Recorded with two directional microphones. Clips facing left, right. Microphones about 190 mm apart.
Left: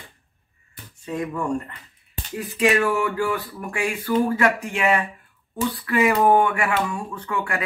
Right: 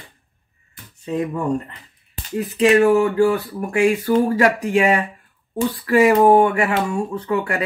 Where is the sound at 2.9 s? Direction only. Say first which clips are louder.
Right 8 dB; 25° right (ahead or behind).